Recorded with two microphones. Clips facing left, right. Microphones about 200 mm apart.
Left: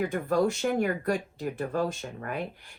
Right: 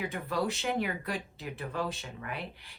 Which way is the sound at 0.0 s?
50° left (ahead or behind).